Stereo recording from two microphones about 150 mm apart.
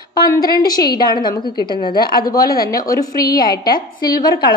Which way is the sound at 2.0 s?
80° left.